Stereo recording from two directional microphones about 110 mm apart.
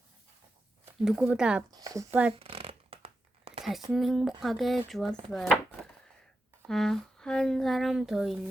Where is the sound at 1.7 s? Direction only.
30° right (ahead or behind).